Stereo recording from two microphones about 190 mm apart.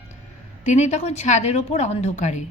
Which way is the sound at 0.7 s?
40° left (ahead or behind).